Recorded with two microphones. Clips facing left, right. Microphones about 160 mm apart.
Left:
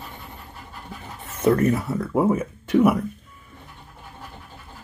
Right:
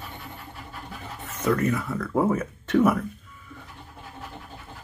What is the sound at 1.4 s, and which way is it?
Speech, 30° left (ahead or behind).